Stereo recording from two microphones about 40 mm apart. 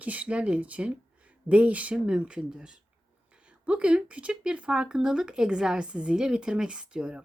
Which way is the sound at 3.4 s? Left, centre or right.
Right.